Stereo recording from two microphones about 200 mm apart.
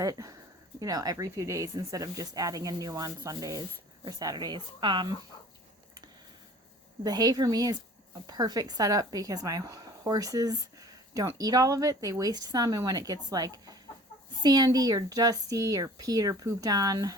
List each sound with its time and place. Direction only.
0.0 s speech: 20° right (ahead or behind)
7.0 s speech: 20° right (ahead or behind)